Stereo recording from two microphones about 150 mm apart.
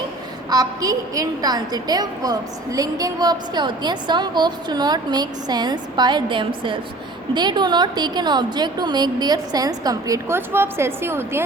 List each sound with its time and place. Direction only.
0.5 s a woman's voice: 25° right (ahead or behind)